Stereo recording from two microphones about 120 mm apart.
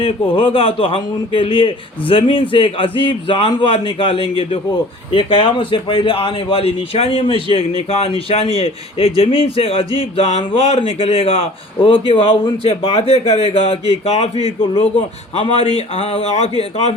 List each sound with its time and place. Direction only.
0.0 s a man's voice: 45° left (ahead or behind); by 16.9 s 60° left (ahead or behind)